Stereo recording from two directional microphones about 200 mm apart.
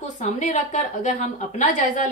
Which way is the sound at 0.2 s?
35° left (ahead or behind).